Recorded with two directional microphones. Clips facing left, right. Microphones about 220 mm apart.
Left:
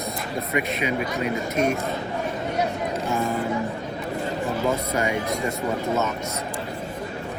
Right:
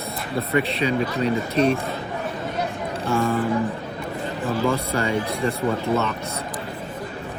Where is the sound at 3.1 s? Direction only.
15° left (ahead or behind).